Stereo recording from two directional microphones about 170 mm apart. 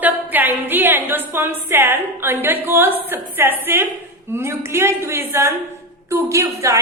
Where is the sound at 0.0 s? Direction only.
10° right (ahead or behind).